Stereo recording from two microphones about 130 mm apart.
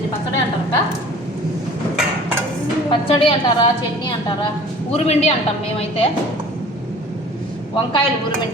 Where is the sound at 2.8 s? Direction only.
40° left (ahead or behind).